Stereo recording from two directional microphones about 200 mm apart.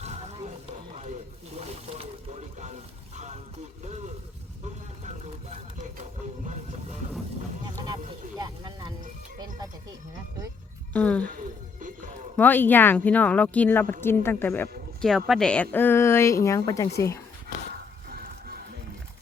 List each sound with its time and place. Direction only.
0.0 s roaring cats: 35° right (ahead or behind)
1.5 s a sound: 30° right (ahead or behind)
5.0 s vehicle: 35° right (ahead or behind)
8.4 s music: 20° right (ahead or behind)
10.9 s a sound: 5° left (ahead or behind)
11.8 s music: 40° right (ahead or behind)
12.4 s a woman's voice: 10° left (ahead or behind)
18.1 s music: 50° right (ahead or behind)